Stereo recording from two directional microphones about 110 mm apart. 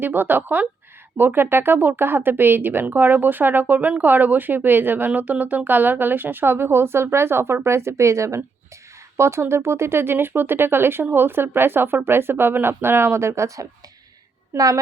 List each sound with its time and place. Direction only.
0.0 s speech: 15° right (ahead or behind)